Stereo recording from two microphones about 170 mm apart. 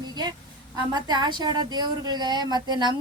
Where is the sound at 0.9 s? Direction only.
25° right (ahead or behind).